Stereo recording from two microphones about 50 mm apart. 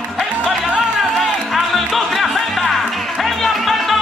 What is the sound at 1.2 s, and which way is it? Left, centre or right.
Music, centre.